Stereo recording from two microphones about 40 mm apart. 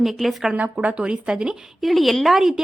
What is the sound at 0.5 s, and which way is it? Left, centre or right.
Speech, right.